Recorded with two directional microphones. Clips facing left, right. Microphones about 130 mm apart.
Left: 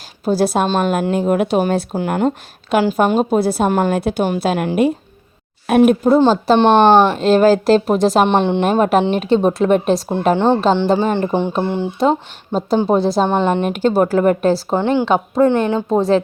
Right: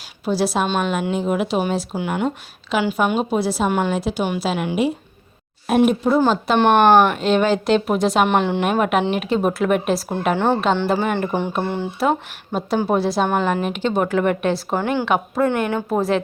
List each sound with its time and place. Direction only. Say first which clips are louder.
0.3 s speech: left 4 dB; 50° left (ahead or behind)
6.1 s a woman's voice: left 5 dB; 30° left (ahead or behind)
7.2 s a woman's voice: left 6 dB; 35° left (ahead or behind)
8.6 s speech: left 4 dB; 35° left (ahead or behind)
10.3 s a woman's voice: left 4 dB; 20° left (ahead or behind)